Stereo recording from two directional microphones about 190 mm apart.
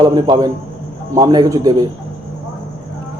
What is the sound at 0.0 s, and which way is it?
A man's voice, 20° right (ahead or behind).